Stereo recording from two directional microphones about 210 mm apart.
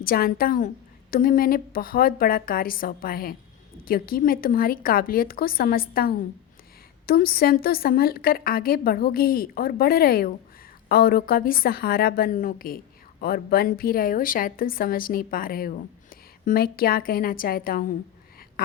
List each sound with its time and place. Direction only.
0.0 s a woman's voice: 45° left (ahead or behind)